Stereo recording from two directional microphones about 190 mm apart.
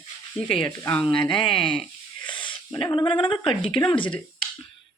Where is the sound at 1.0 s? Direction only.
25° left (ahead or behind).